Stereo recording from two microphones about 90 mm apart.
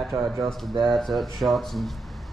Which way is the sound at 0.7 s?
50° right (ahead or behind).